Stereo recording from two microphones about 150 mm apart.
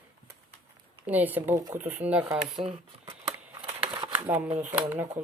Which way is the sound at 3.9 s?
30° right (ahead or behind).